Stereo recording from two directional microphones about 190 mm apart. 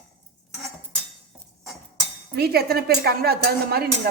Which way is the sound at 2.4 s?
55° right (ahead or behind).